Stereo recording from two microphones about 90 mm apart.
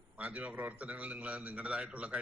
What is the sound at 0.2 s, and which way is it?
A man's voice, 15° right (ahead or behind).